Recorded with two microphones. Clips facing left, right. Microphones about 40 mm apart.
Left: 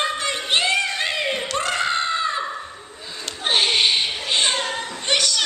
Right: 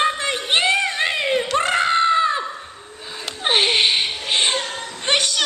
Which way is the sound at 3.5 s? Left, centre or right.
Right.